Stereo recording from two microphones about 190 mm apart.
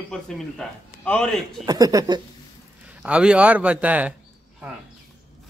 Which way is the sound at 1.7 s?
20° right (ahead or behind).